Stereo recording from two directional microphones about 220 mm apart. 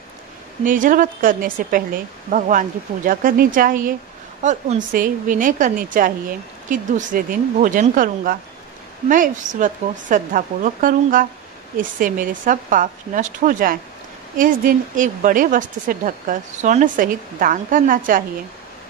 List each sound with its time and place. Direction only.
0.7 s a woman's voice: 35° right (ahead or behind)